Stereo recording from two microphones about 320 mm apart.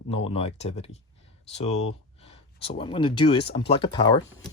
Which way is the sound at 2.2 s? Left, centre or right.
Centre.